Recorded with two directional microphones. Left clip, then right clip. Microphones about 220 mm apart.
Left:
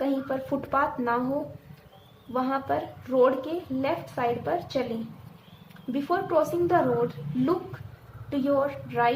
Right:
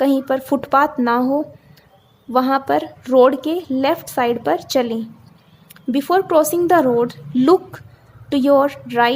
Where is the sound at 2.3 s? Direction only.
45° right (ahead or behind).